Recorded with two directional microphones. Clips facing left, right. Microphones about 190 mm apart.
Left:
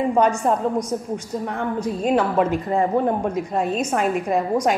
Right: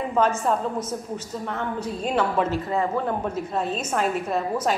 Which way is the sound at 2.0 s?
10° left (ahead or behind).